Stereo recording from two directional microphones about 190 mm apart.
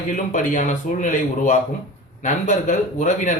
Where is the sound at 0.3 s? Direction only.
40° left (ahead or behind).